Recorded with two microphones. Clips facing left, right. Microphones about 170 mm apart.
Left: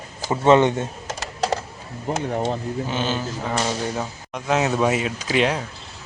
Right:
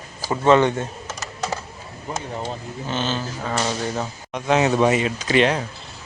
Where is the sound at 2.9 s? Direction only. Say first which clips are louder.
Right 3 dB; 10° left (ahead or behind).